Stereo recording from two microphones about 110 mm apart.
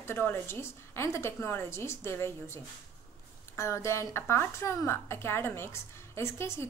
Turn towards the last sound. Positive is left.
turn(degrees=25)  # may be behind; listen again after turning